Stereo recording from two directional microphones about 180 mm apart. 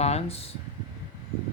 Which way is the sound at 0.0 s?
35° left (ahead or behind).